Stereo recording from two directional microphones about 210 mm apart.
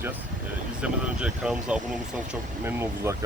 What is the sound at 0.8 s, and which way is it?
Speech, 5° right (ahead or behind).